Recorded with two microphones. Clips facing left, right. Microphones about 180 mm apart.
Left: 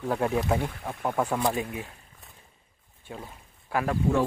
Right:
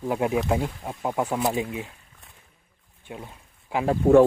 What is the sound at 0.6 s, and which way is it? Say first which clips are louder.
Speech: right 2 dB; 10° right (ahead or behind).